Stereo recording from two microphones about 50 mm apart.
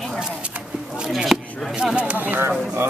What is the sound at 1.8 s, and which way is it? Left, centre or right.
Speech, centre.